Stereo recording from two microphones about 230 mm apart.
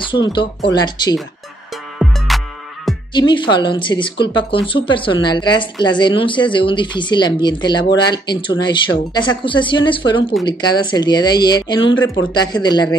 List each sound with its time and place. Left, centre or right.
0.1 s speech: left
2.0 s music: centre
3.1 s a man's voice: centre